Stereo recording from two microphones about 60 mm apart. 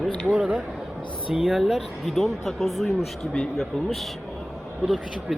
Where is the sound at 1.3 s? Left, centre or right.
Centre.